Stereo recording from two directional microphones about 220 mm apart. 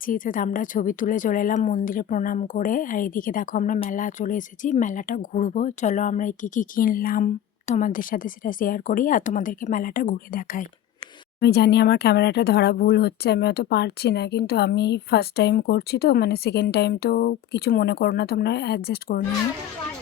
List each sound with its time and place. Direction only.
0.0 s speech: 40° left (ahead or behind)